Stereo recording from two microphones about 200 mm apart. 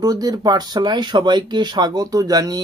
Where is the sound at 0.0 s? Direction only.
20° right (ahead or behind).